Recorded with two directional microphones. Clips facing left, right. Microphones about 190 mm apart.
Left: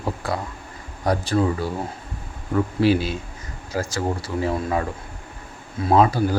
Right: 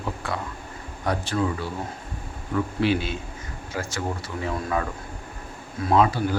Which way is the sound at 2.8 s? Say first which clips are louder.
Left 5 dB; 35° left (ahead or behind).